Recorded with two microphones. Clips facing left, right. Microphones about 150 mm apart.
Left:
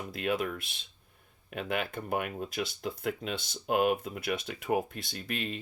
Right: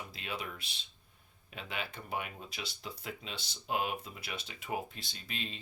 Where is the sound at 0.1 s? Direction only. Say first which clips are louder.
Left 15 dB; 55° left (ahead or behind).